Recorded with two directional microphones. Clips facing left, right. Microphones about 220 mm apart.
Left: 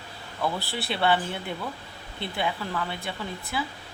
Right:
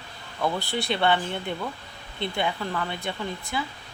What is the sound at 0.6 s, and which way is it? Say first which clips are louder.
Speech: right 2 dB; 5° left (ahead or behind).